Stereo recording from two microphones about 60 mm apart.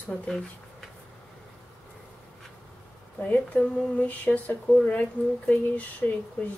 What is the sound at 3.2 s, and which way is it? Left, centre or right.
Speech, left.